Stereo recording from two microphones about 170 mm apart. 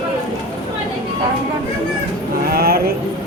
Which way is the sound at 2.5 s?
65° right (ahead or behind).